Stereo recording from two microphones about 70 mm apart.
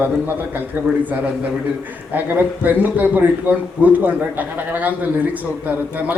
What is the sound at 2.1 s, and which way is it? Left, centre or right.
A man's voice, right.